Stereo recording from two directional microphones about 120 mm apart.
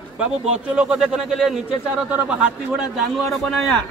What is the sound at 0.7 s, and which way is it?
Speech, 10° right (ahead or behind).